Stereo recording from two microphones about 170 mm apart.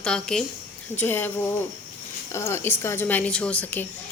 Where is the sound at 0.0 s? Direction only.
5° left (ahead or behind).